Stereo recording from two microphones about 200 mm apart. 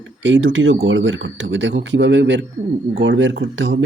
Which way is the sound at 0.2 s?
65° right (ahead or behind).